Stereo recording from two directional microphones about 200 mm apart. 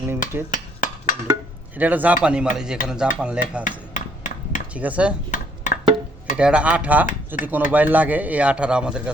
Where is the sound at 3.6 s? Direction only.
40° left (ahead or behind).